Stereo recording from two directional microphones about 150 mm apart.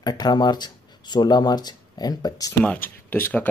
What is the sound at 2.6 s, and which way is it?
Speech, 10° left (ahead or behind).